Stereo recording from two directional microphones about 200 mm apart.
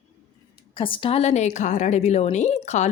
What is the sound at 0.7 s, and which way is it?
Speech, 25° left (ahead or behind).